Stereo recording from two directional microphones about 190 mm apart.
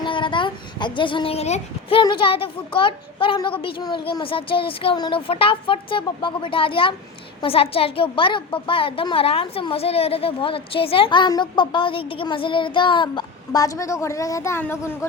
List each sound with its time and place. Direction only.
0.0 s a child's voice: 25° left (ahead or behind)